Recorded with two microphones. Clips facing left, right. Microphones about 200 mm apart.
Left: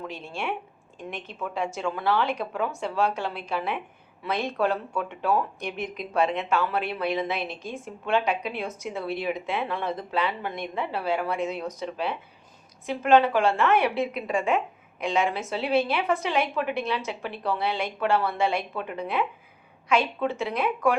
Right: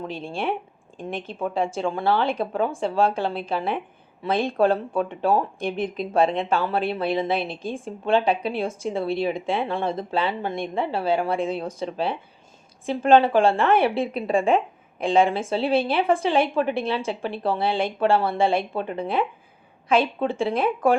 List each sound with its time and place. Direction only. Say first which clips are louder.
0.0 s a woman's voice: right 5 dB; 30° right (ahead or behind)